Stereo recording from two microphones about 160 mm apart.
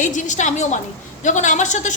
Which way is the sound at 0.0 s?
50° left (ahead or behind).